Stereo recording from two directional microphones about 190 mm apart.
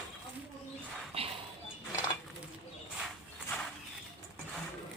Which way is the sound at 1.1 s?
30° right (ahead or behind).